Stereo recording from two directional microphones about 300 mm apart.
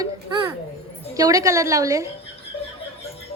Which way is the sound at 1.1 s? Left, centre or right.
Centre.